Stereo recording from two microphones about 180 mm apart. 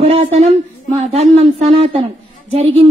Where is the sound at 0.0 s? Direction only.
35° right (ahead or behind).